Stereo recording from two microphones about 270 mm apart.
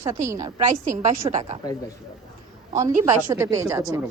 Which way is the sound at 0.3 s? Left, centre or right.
Centre.